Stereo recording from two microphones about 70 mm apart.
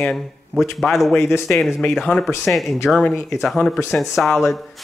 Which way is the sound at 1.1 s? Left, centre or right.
Left.